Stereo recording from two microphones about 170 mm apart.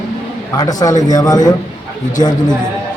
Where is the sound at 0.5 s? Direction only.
20° left (ahead or behind).